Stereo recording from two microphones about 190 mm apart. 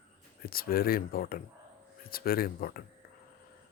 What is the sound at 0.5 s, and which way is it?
Speech, 50° left (ahead or behind).